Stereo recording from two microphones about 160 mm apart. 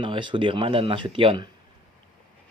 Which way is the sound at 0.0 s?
30° right (ahead or behind).